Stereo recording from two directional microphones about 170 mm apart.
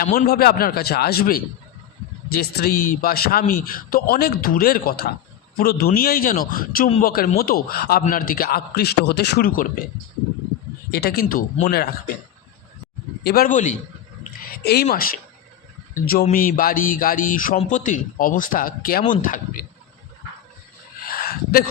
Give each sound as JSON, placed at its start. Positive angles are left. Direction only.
{"t": 0.3, "sound": "a man's voice", "side_deg": 60}
{"t": 10.9, "sound": "a man's voice", "side_deg": 65}
{"t": 11.7, "sound": "speech", "side_deg": 70}
{"t": 13.2, "sound": "speech", "side_deg": 60}
{"t": 14.5, "sound": "a man's voice", "side_deg": 65}
{"t": 21.2, "sound": "a sound", "side_deg": 60}